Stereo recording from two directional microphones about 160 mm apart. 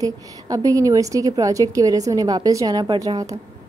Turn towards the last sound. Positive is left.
turn(degrees=-20)  # may be behind; listen again after turning